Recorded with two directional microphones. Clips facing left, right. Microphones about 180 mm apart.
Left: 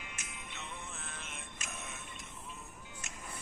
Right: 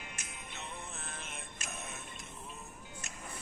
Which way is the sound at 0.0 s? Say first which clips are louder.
Right 1 dB; 40° right (ahead or behind).